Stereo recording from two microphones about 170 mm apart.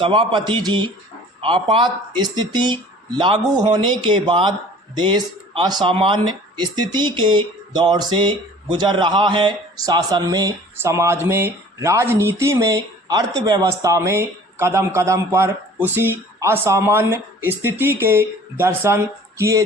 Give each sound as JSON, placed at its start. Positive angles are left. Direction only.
{"t": 0.0, "sound": "a man's voice", "side_deg": -30}